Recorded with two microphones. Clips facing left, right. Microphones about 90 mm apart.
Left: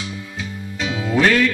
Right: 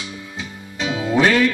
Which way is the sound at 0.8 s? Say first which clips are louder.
Right 1 dB; 10° right (ahead or behind).